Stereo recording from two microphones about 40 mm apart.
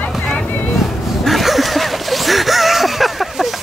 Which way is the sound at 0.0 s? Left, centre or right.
Left.